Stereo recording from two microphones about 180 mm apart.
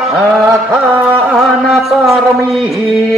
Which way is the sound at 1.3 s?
Centre (ahead or behind).